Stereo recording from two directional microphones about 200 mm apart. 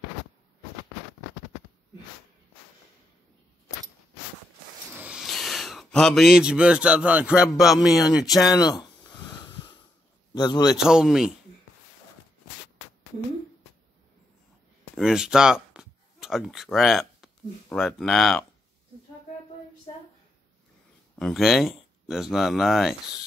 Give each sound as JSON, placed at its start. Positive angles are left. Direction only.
{"t": 4.9, "sound": "speech", "side_deg": -5}
{"t": 8.5, "sound": "a sound", "side_deg": 20}
{"t": 10.3, "sound": "a man's voice", "side_deg": 20}
{"t": 10.8, "sound": "speech", "side_deg": -5}
{"t": 15.0, "sound": "speech", "side_deg": -5}
{"t": 21.2, "sound": "speech", "side_deg": 0}